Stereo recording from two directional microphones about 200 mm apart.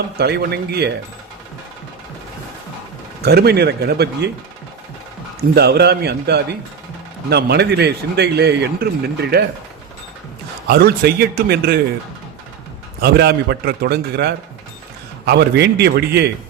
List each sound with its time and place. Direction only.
0.2 s a man's voice: 55° right (ahead or behind)
3.2 s a man's voice: 55° right (ahead or behind)
5.4 s a man's voice: 50° right (ahead or behind)
10.7 s a man's voice: 50° right (ahead or behind)
13.0 s a man's voice: 55° right (ahead or behind)